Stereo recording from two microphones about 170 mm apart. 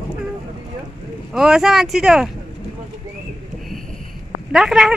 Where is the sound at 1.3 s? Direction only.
Centre (ahead or behind).